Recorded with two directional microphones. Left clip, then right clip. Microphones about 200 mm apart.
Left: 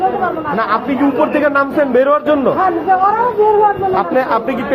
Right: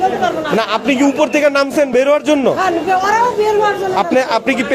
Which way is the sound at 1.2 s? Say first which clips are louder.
Even; 80° right.